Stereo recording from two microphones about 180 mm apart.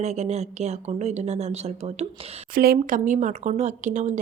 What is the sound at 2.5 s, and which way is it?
Speech, 55° right (ahead or behind).